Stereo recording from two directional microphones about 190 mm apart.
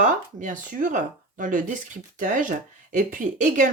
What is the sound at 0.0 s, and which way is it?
Speech, 40° right (ahead or behind).